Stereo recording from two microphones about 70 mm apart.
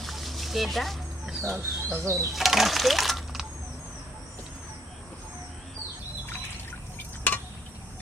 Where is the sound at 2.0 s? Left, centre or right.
Right.